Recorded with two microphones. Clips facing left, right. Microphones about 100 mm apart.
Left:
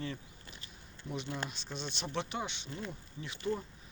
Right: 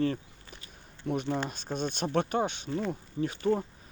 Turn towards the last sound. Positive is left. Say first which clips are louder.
# right 9 dB
turn(degrees=-50)  # may be behind; listen again after turning